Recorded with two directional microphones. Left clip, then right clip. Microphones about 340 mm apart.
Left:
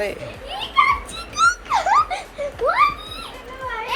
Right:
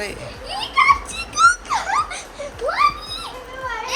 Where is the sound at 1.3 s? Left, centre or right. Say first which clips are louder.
Right 3 dB; centre.